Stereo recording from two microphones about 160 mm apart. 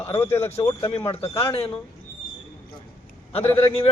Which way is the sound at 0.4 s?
40° left (ahead or behind).